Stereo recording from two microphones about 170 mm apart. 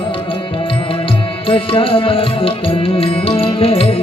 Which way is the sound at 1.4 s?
30° left (ahead or behind).